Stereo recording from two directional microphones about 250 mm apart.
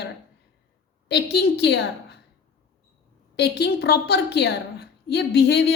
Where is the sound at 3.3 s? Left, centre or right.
Left.